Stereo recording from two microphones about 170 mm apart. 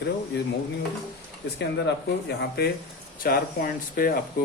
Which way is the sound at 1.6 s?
80° left.